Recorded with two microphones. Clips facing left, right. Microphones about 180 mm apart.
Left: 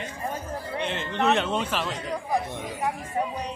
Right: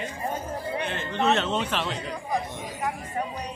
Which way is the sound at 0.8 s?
20° left (ahead or behind).